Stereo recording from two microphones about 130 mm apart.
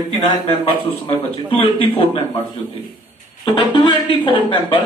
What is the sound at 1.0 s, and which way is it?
A man's voice, 45° left (ahead or behind).